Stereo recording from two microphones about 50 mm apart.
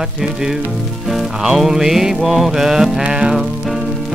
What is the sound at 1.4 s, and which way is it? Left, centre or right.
Music, centre.